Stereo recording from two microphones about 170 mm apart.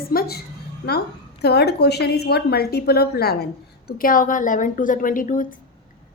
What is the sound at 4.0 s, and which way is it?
A woman's voice, 55° left (ahead or behind).